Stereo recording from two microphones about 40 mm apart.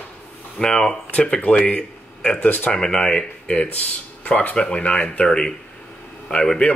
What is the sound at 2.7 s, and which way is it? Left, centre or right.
Speech, centre.